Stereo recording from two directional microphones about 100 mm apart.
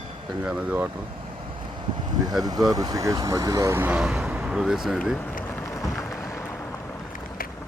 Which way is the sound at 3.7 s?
20° right (ahead or behind).